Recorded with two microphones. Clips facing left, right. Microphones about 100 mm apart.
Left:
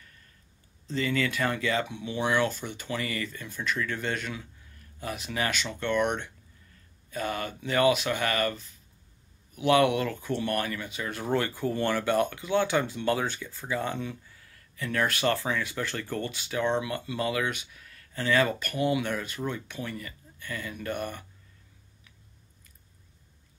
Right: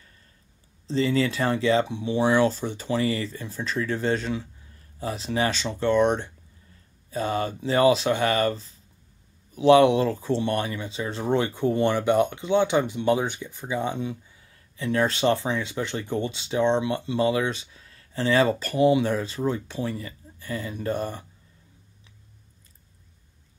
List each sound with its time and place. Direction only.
0.8 s speech: 30° right (ahead or behind)